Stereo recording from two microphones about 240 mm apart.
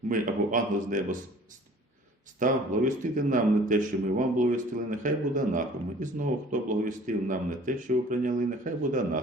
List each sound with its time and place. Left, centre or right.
0.1 s a man's voice: right
2.4 s a man's voice: right